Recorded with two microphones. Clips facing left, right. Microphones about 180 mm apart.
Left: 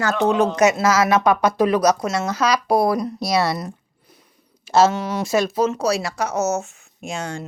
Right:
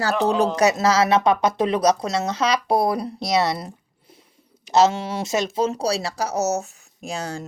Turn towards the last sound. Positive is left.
turn(degrees=-35)  # may be behind; listen again after turning